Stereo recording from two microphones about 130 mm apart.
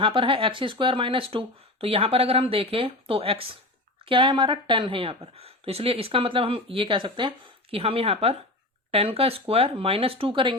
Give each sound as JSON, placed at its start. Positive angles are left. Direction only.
{"t": 0.0, "sound": "speech", "side_deg": -40}